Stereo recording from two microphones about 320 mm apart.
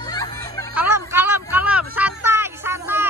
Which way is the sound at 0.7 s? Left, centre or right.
Centre.